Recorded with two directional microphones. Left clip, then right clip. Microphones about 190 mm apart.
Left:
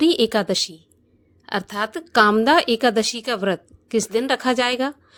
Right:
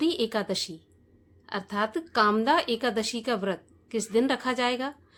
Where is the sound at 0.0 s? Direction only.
40° left (ahead or behind).